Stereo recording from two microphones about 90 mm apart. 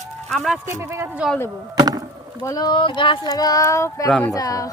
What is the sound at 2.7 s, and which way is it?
Speech, 65° left (ahead or behind).